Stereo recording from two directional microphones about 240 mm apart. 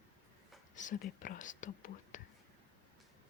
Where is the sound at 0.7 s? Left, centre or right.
Left.